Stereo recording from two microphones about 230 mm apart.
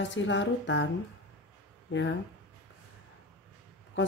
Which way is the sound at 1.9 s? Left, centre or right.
Left.